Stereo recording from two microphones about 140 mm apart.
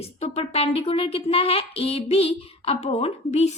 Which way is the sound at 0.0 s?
45° left (ahead or behind).